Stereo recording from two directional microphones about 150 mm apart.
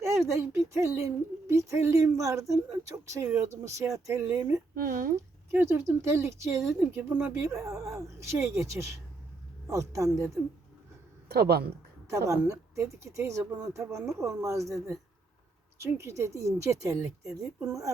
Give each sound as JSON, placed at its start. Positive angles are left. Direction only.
{"t": 0.3, "sound": "speech", "side_deg": -20}
{"t": 4.7, "sound": "speech", "side_deg": -75}
{"t": 5.1, "sound": "speech", "side_deg": -15}
{"t": 11.3, "sound": "speech", "side_deg": -90}
{"t": 12.3, "sound": "speech", "side_deg": -20}